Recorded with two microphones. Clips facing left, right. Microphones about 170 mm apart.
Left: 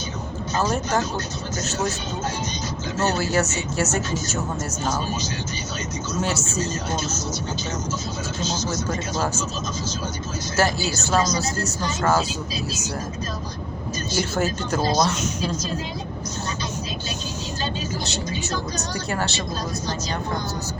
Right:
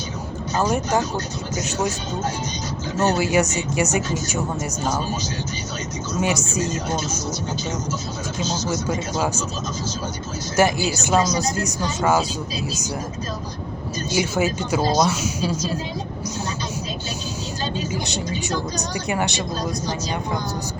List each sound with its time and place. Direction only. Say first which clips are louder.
0.5 s a woman's voice: right 2 dB; 15° right (ahead or behind)
3.0 s a woman's voice: right 3 dB; 15° right (ahead or behind)
6.1 s a woman's voice: right 3 dB; 10° right (ahead or behind)
8.4 s a woman's voice: right 3 dB; 10° right (ahead or behind)
10.6 s a woman's voice: right 4 dB; 15° right (ahead or behind)
14.1 s a woman's voice: right 3 dB; 10° right (ahead or behind)
18.0 s a woman's voice: right 2 dB; 15° right (ahead or behind)